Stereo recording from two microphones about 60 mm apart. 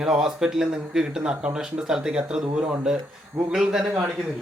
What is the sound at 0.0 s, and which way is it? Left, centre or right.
A woman's voice, centre.